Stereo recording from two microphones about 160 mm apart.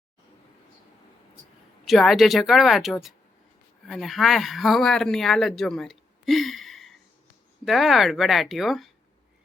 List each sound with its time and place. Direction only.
1.8 s speech: centre (ahead or behind)